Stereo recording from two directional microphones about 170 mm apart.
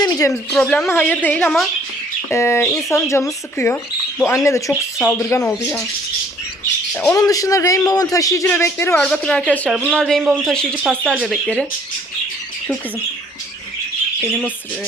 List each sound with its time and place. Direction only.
0.0 s a man's voice: 20° left (ahead or behind)
5.3 s a man's voice: 5° left (ahead or behind)
6.9 s a man's voice: 15° left (ahead or behind); by 11.6 s centre (ahead or behind)